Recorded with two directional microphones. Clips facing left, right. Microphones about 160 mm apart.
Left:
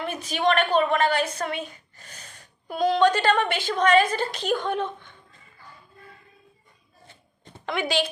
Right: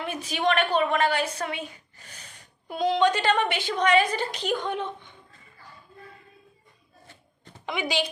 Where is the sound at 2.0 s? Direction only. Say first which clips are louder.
Left 2 dB; 45° left (ahead or behind).